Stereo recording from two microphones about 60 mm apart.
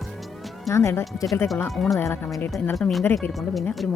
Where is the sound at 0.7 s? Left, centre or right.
Left.